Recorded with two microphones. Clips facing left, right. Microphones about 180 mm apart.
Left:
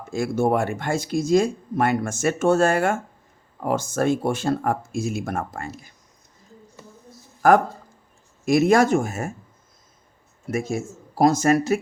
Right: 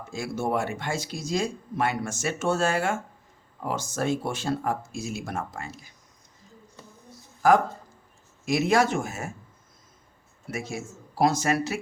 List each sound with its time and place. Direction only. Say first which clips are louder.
0.1 s speech: left 7 dB; 50° left (ahead or behind)
7.4 s speech: left 4 dB; 55° left (ahead or behind)
10.4 s speech: left 8 dB; 45° left (ahead or behind)